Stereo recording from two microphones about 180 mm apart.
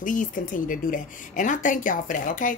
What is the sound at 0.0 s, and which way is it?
A woman's voice, 50° left (ahead or behind).